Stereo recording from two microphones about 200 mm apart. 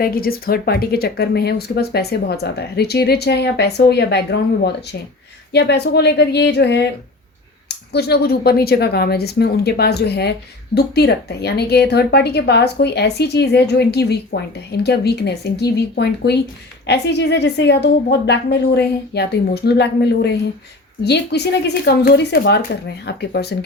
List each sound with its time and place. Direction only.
0.0 s a woman's voice: 50° left (ahead or behind)